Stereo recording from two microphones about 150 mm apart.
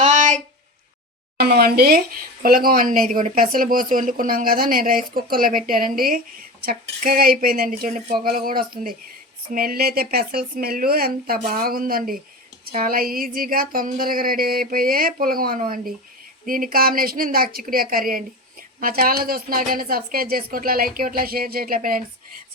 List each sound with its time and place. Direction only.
0.0 s a sound: 55° right (ahead or behind)
1.4 s speech: 90° right
2.4 s speech: 70° right (ahead or behind)